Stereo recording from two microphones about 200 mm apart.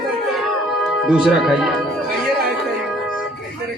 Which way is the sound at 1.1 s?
5° right (ahead or behind).